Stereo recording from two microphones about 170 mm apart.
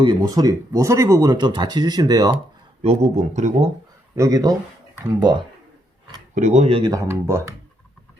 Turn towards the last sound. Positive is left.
turn(degrees=-15)  # may be behind; listen again after turning